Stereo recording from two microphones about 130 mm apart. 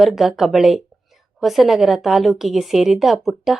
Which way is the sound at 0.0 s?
Centre (ahead or behind).